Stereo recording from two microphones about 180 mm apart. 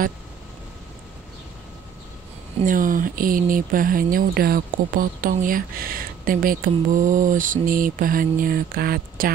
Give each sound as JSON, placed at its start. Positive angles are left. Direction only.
{"t": 2.6, "sound": "speech", "side_deg": -50}